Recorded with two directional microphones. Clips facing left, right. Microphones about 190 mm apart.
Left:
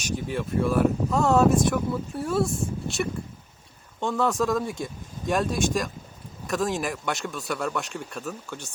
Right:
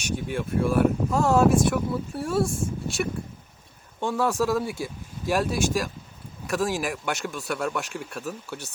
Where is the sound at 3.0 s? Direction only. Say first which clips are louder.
Right 1 dB; 5° right (ahead or behind).